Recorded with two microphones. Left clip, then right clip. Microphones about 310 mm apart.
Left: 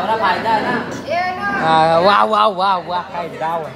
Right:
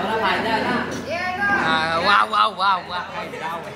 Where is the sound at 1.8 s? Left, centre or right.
Centre.